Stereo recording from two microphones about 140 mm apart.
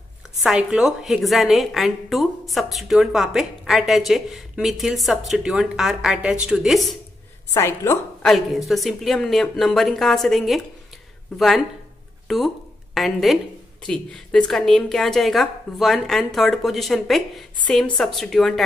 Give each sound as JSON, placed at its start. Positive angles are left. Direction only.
{"t": 0.4, "sound": "a woman's voice", "side_deg": -5}
{"t": 7.5, "sound": "a woman's voice", "side_deg": 20}
{"t": 8.2, "sound": "a woman's voice", "side_deg": 0}